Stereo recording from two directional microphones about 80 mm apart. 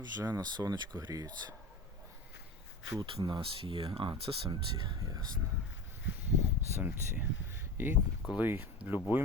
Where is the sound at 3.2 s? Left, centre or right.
Right.